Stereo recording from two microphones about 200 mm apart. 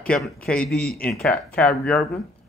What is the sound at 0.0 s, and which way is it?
Speech, 5° left (ahead or behind).